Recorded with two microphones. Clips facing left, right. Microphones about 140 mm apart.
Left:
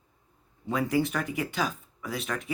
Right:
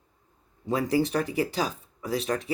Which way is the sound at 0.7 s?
35° right (ahead or behind).